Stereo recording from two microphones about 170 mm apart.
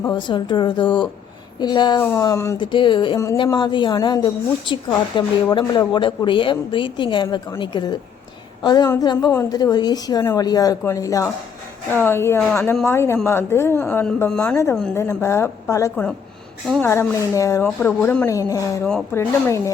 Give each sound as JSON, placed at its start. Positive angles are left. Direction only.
{"t": 0.1, "sound": "a woman's voice", "side_deg": 25}
{"t": 2.7, "sound": "a woman's voice", "side_deg": 30}